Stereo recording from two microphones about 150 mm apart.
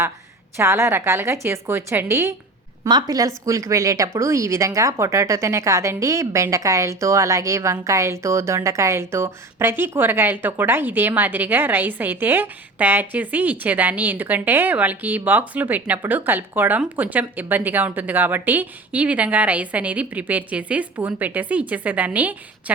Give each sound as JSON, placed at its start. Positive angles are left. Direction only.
{"t": 0.5, "sound": "speech", "side_deg": -20}